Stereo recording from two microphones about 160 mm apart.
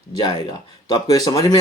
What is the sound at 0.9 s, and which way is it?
Speech, 25° left (ahead or behind).